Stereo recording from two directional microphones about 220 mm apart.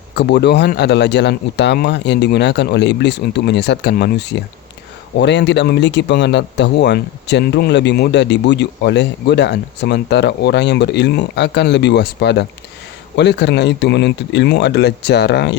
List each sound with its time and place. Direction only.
0.2 s speech: 50° left (ahead or behind)